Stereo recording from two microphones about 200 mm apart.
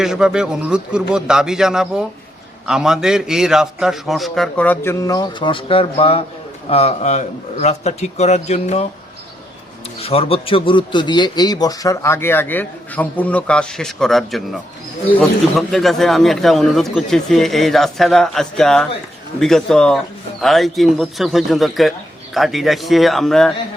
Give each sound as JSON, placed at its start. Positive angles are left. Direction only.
{"t": 0.0, "sound": "a man's voice", "side_deg": -5}
{"t": 10.0, "sound": "a man's voice", "side_deg": 30}